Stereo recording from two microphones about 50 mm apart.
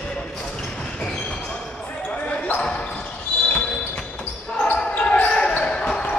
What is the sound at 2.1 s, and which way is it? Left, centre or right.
Basketball bounce, left.